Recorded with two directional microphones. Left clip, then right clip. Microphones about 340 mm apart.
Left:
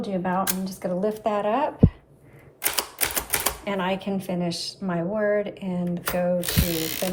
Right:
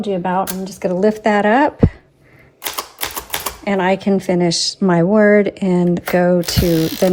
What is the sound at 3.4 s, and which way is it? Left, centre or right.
Speech, centre.